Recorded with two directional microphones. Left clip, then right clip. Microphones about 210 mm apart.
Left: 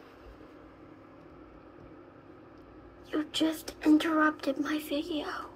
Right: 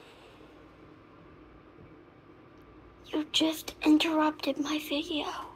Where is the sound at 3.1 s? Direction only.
15° right (ahead or behind).